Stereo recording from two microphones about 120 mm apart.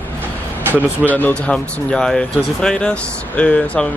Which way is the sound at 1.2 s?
15° left (ahead or behind).